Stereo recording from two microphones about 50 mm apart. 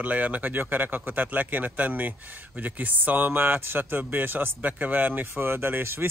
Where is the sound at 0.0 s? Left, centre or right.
Right.